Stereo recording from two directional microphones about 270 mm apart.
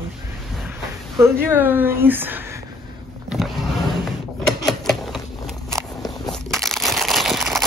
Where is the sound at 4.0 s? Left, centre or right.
Centre.